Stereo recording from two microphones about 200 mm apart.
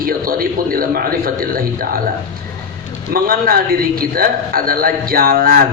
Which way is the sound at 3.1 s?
45° right (ahead or behind).